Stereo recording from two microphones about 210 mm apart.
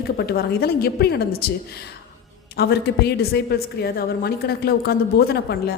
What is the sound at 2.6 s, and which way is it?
Speech, 50° left (ahead or behind).